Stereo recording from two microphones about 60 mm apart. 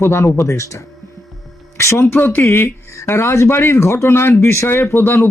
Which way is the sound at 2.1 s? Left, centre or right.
Left.